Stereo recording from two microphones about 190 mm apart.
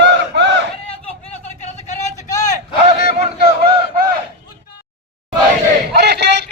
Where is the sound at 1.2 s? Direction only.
35° left (ahead or behind).